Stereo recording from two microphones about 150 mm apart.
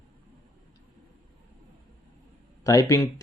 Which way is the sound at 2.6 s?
20° left (ahead or behind).